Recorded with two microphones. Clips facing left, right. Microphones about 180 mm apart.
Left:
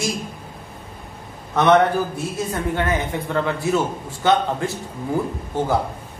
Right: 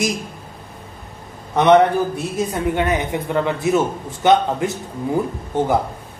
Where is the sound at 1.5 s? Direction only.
15° right (ahead or behind).